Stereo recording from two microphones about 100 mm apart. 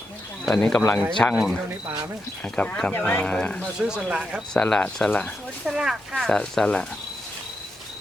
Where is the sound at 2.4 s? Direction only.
10° left (ahead or behind).